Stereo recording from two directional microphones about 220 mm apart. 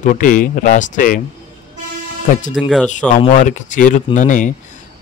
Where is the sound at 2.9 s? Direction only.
35° left (ahead or behind).